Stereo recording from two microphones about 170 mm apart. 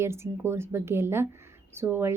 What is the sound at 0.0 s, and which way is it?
A woman's voice, 15° right (ahead or behind).